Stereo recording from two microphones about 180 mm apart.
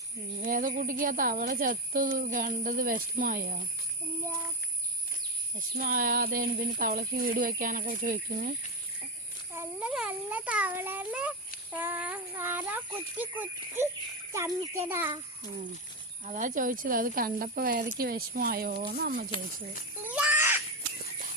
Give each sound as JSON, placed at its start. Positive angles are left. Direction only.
{"t": 0.4, "sound": "speech", "side_deg": -50}
{"t": 5.5, "sound": "speech", "side_deg": -50}
{"t": 9.5, "sound": "speech", "side_deg": -15}
{"t": 16.2, "sound": "speech", "side_deg": -45}
{"t": 20.0, "sound": "a sound", "side_deg": -10}